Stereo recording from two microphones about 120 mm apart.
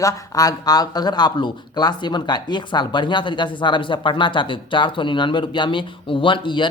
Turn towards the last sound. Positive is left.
turn(degrees=40)  # may be behind; listen again after turning